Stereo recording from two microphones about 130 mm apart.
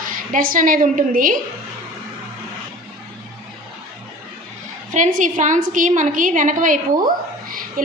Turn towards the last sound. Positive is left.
turn(degrees=-90)